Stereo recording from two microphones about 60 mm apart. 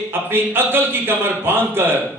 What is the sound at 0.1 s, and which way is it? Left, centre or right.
A man's voice, right.